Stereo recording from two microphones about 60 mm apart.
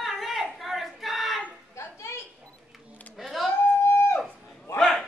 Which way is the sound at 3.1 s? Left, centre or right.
Centre.